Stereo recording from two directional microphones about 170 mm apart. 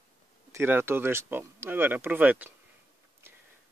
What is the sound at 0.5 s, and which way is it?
Speech, 15° right (ahead or behind).